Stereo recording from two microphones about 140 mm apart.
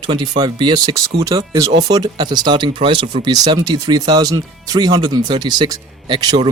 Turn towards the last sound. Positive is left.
turn(degrees=-30)  # may be behind; listen again after turning